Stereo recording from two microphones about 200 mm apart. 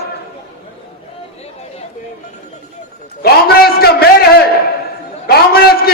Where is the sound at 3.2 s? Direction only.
50° left (ahead or behind).